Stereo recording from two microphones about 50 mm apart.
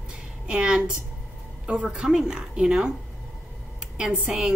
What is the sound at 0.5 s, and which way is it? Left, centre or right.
A woman's voice, centre.